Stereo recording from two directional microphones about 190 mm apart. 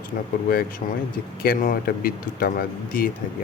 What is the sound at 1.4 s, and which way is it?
Speech, 50° left (ahead or behind).